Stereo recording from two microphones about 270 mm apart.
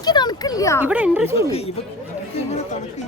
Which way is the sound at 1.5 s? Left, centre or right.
Left.